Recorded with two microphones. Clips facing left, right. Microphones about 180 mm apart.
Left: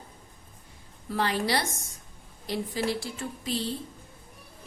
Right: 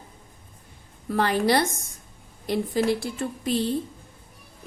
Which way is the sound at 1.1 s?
50° right (ahead or behind).